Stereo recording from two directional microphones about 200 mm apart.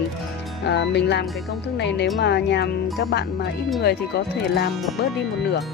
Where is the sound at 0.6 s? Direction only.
60° left (ahead or behind).